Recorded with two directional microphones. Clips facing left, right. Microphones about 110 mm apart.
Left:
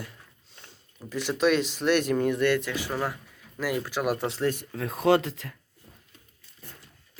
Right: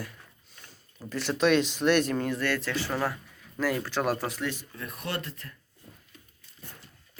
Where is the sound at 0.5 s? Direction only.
25° left (ahead or behind).